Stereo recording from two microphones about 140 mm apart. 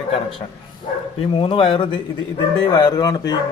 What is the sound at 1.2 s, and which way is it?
A man's voice, 40° left (ahead or behind).